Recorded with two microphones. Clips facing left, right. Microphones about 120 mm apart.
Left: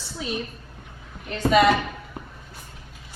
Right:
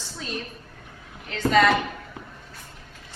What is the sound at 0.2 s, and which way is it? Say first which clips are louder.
A woman's voice: left 4 dB; 10° left (ahead or behind).